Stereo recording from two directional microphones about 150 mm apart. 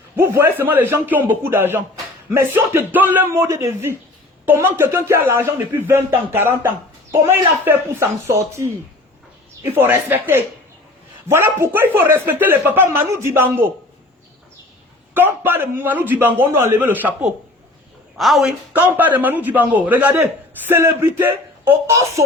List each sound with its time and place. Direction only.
0.2 s speech: 15° right (ahead or behind)
9.7 s speech: 15° right (ahead or behind)
15.1 s speech: 15° right (ahead or behind)